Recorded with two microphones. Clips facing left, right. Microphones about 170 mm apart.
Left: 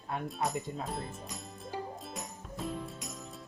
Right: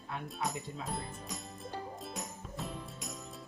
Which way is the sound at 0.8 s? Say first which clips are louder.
Left 2 dB; centre (ahead or behind).